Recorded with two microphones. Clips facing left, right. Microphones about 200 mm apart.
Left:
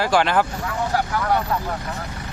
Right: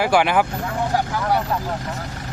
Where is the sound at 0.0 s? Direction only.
10° right (ahead or behind).